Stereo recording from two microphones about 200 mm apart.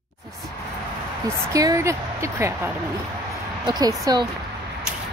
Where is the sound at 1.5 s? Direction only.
15° right (ahead or behind).